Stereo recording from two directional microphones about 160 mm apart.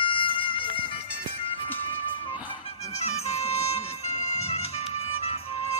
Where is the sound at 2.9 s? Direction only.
40° left (ahead or behind).